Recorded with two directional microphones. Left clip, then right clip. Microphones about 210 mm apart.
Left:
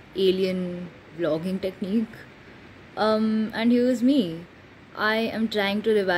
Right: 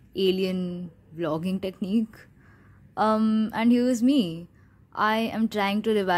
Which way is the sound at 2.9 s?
35° right (ahead or behind).